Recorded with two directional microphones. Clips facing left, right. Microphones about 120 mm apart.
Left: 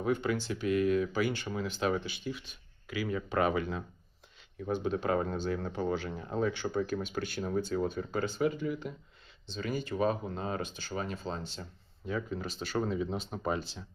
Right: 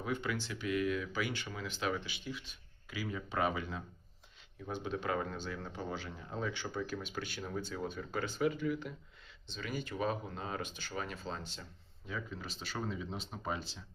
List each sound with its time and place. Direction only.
0.0 s speech: 40° left (ahead or behind); by 3.8 s 60° left (ahead or behind)
4.6 s speech: 45° left (ahead or behind); by 8.9 s 25° left (ahead or behind)
9.5 s speech: 35° left (ahead or behind)
12.0 s speech: 50° left (ahead or behind)